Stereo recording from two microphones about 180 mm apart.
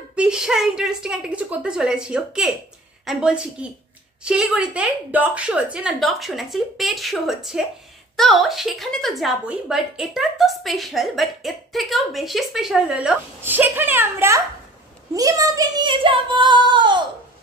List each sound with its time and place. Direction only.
0.1 s a woman's voice: 5° right (ahead or behind); by 17.0 s 25° right (ahead or behind)